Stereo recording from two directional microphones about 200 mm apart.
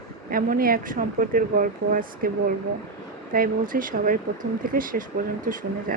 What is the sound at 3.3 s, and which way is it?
Speech, 45° right (ahead or behind).